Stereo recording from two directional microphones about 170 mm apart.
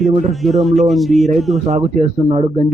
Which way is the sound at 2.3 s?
35° right (ahead or behind).